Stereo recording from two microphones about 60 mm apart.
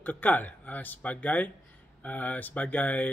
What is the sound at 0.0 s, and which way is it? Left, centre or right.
Speech, left.